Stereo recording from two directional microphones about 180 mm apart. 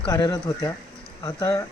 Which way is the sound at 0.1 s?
20° left (ahead or behind).